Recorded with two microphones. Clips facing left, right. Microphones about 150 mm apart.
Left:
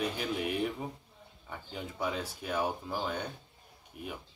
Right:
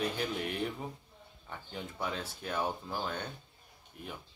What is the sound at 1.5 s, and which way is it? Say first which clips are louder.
Speech: left 1 dB; 5° left (ahead or behind).